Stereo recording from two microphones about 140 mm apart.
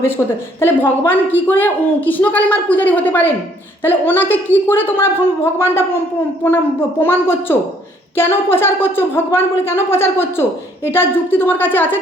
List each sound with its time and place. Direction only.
0.2 s a woman's voice: 15° left (ahead or behind)